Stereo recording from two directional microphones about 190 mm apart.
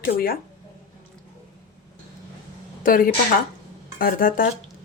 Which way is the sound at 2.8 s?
50° left (ahead or behind).